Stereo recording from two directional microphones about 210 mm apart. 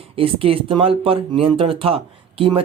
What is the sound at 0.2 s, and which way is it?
Speech, 25° right (ahead or behind).